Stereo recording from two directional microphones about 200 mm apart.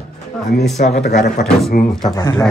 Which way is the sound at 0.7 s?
35° left (ahead or behind).